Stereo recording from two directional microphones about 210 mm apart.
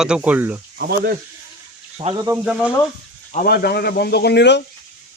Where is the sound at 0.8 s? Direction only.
50° right (ahead or behind).